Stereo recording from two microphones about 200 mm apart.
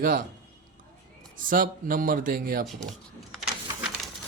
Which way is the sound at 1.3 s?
45° right (ahead or behind).